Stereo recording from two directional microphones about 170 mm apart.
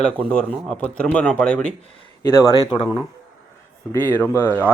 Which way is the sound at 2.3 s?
20° left (ahead or behind).